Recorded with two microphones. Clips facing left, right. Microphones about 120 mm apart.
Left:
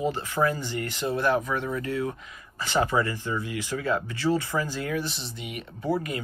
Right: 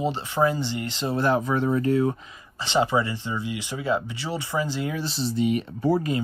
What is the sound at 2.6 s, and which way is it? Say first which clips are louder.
Speech: right 2 dB; 20° right (ahead or behind).